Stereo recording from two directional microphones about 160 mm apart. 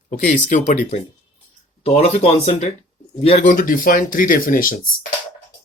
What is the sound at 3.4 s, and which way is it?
Speech, 60° left (ahead or behind).